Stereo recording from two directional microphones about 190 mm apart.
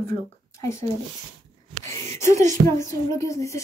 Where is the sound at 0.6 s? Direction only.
15° left (ahead or behind).